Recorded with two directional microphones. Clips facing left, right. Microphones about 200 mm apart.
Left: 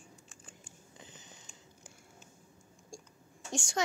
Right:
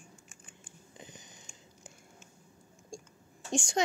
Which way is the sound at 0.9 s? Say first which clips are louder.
Right 3 dB; 15° right (ahead or behind).